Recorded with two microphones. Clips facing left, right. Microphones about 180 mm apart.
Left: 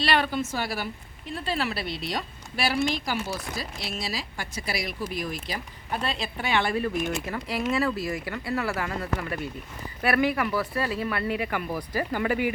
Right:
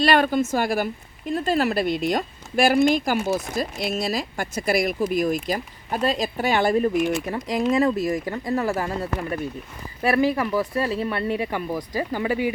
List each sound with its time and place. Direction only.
0.0 s a woman's voice: 45° right (ahead or behind); by 12.4 s 15° right (ahead or behind)